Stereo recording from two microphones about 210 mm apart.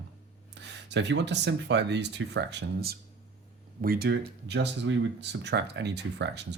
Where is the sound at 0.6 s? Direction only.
55° right (ahead or behind).